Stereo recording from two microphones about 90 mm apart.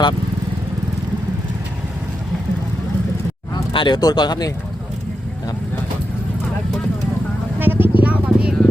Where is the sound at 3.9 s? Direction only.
50° left (ahead or behind).